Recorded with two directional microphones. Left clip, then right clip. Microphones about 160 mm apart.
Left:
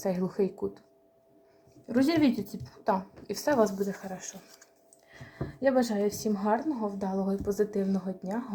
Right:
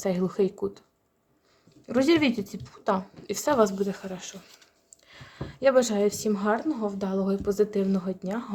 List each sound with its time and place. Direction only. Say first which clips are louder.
0.0 s a woman's voice: right 4 dB; 20° right (ahead or behind)
1.9 s speech: right 3 dB; 40° right (ahead or behind)
2.8 s a woman's voice: right 2 dB; 25° right (ahead or behind)
5.6 s a woman's voice: right 5 dB; 45° right (ahead or behind)